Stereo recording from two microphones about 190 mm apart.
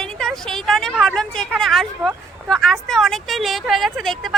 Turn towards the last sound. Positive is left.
turn(degrees=0)  # may be behind; listen again after turning